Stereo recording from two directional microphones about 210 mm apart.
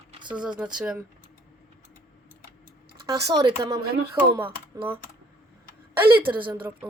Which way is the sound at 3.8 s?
50° right (ahead or behind).